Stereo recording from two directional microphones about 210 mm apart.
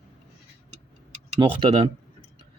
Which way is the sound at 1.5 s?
25° right (ahead or behind).